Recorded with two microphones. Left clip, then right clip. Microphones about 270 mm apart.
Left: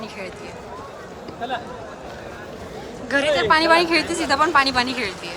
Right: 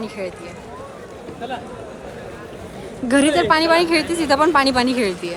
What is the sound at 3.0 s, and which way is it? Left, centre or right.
Speech, centre.